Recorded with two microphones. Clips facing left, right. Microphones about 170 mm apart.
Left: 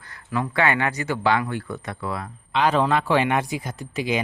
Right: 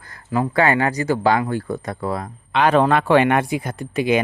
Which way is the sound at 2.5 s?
60° right (ahead or behind).